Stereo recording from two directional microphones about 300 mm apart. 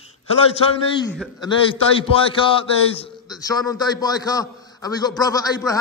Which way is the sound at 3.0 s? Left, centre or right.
Centre.